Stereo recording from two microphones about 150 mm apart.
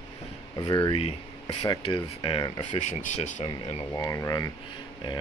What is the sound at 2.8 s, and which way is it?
Speech, 50° left (ahead or behind).